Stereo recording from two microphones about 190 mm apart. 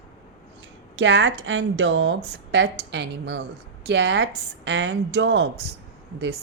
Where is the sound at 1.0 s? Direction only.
75° right (ahead or behind).